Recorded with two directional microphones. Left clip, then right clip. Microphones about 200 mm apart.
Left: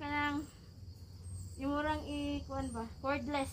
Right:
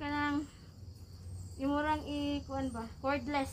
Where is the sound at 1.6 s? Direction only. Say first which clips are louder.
Right 3 dB; 15° right (ahead or behind).